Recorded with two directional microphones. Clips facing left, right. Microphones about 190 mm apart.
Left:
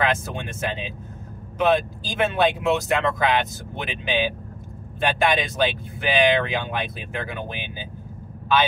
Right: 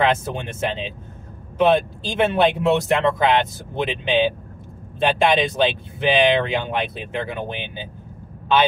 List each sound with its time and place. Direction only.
0.0 s speech: 25° right (ahead or behind)